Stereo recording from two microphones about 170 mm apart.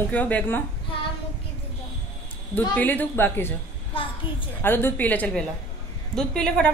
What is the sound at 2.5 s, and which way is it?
Speech, 10° left (ahead or behind).